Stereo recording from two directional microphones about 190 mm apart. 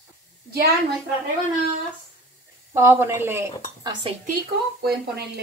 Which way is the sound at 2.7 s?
10° right (ahead or behind).